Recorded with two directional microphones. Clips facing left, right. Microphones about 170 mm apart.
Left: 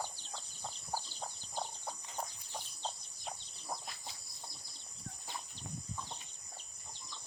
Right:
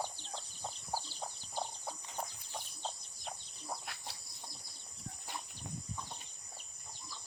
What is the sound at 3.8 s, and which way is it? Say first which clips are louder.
Bird: right 1 dB; 70° right (ahead or behind).